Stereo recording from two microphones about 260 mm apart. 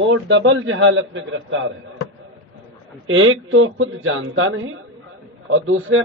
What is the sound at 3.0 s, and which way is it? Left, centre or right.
A man's voice, right.